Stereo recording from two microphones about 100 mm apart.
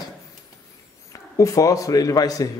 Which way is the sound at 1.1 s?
30° left (ahead or behind).